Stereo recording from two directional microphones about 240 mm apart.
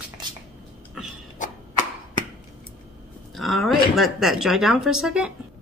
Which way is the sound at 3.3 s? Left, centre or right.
Centre.